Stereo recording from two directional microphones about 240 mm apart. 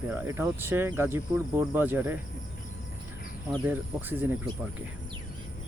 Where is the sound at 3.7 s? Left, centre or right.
Centre.